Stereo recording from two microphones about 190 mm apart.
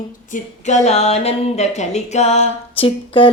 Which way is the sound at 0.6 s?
35° left (ahead or behind).